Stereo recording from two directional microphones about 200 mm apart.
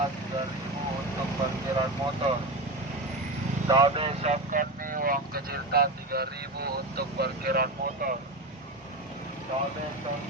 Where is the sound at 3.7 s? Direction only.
25° right (ahead or behind); by 8.1 s 50° right (ahead or behind).